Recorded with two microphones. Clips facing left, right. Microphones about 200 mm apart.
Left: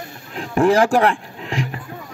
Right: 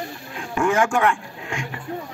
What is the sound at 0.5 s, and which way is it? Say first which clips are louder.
Speech: left 5 dB; 35° left (ahead or behind).